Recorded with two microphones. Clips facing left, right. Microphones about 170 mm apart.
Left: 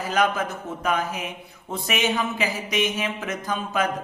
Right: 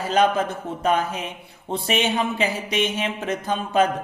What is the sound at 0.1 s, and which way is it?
A man's voice, 30° right (ahead or behind).